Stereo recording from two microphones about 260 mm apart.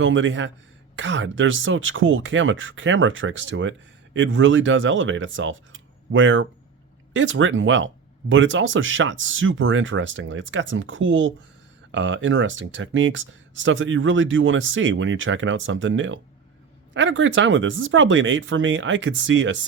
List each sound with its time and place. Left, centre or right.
0.0 s speech: right